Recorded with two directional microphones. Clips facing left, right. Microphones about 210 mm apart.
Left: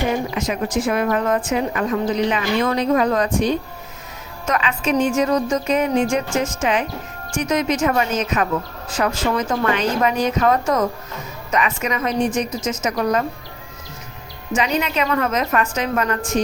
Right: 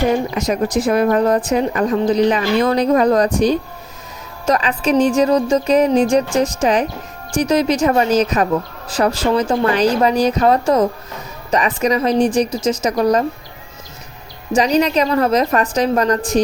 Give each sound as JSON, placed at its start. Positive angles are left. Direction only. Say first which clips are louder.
{"t": 0.3, "sound": "speech", "louder": "right 4 dB", "side_deg": -40}
{"t": 14.5, "sound": "speech", "louder": "right 6 dB", "side_deg": -35}